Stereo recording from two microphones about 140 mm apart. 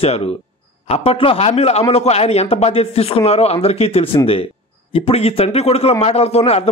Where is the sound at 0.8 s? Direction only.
45° left (ahead or behind).